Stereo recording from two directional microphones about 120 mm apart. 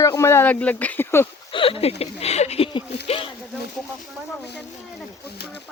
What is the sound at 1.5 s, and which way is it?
Speech, 50° left (ahead or behind).